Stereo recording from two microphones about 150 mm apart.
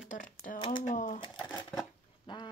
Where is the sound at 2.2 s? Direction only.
30° left (ahead or behind).